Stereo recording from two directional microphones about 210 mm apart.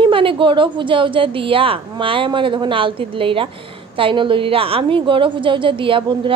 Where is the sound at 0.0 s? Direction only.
25° right (ahead or behind).